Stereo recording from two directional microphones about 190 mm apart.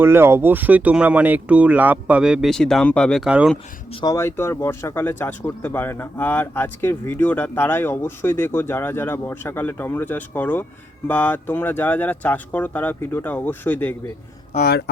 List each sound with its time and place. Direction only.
0.0 s speech: 10° right (ahead or behind)
4.0 s speech: 15° left (ahead or behind)
14.6 s speech: 60° left (ahead or behind)